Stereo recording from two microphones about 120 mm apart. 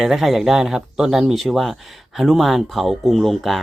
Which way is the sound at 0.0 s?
Centre (ahead or behind).